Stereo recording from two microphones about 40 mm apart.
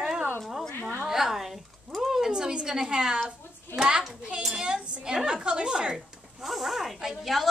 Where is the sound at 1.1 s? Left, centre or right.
Centre.